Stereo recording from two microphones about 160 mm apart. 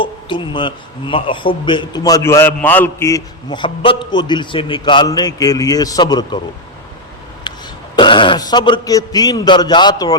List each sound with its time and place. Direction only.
0.0 s a man's voice: 30° left (ahead or behind)
7.5 s a sound: 30° left (ahead or behind)
7.9 s a man's voice: 30° left (ahead or behind)